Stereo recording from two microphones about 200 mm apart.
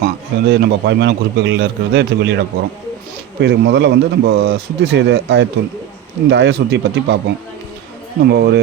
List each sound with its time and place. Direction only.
0.0 s a man's voice: 55° right (ahead or behind)
3.4 s a man's voice: 60° right (ahead or behind)